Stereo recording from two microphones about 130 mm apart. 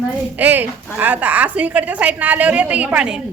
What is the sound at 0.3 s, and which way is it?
A woman's voice, 15° right (ahead or behind).